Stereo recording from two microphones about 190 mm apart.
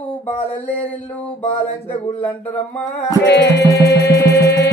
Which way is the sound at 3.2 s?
65° left (ahead or behind).